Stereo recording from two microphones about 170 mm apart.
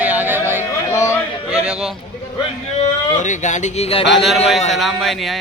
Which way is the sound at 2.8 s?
45° left (ahead or behind).